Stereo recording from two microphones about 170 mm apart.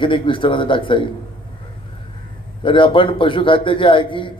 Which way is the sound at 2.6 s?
30° left (ahead or behind).